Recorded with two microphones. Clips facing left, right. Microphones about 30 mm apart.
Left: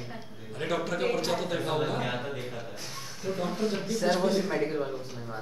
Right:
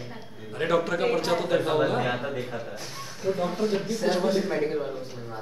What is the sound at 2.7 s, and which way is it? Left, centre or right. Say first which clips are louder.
A man's voice: right 3 dB; centre.